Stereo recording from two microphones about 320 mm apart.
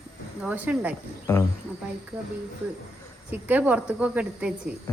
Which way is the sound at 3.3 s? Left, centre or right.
Centre.